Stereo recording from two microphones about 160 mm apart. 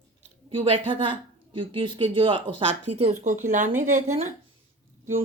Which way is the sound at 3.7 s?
15° right (ahead or behind).